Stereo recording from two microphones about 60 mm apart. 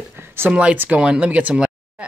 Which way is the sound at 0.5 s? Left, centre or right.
Centre.